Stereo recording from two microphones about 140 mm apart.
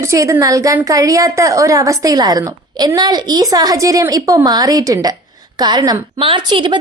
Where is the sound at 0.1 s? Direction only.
20° right (ahead or behind).